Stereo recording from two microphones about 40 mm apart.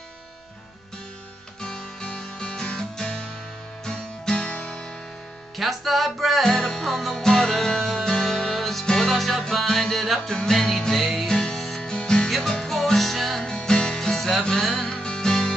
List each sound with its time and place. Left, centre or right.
1.6 s music: centre
5.6 s music: centre
6.5 s music: centre
11.2 s music: left
11.5 s music: centre
11.8 s music: centre
12.3 s music: centre
13.4 s music: centre